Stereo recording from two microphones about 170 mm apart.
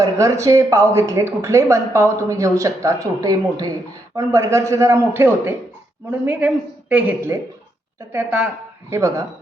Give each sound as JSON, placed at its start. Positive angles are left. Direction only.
{"t": 0.0, "sound": "speech", "side_deg": -20}